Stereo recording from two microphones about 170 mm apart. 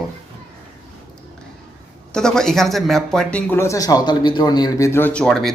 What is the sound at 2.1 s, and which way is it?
A man's voice, 5° left (ahead or behind).